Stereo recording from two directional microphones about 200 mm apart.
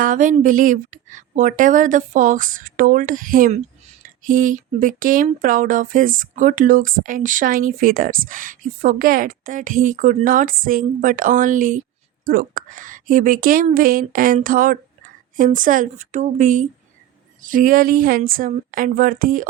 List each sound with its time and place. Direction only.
0.0 s speech: 40° right (ahead or behind)